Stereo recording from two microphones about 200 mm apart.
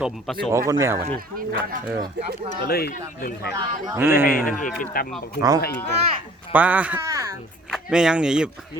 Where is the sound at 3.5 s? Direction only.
20° right (ahead or behind).